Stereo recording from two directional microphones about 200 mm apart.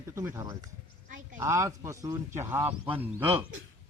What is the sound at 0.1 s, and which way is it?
Speech, 15° right (ahead or behind).